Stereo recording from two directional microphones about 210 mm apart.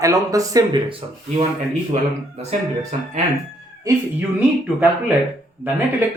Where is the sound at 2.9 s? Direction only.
35° right (ahead or behind).